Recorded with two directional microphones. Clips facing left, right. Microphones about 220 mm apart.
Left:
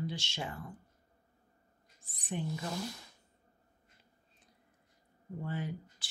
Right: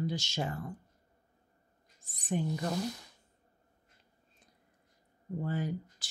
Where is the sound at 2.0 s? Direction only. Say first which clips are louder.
Right 5 dB; 45° right (ahead or behind).